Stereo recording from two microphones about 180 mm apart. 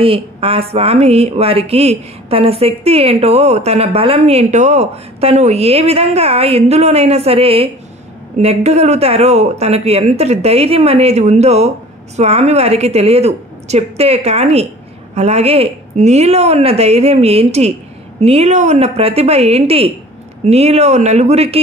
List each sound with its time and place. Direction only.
0.0 s speech: 30° right (ahead or behind)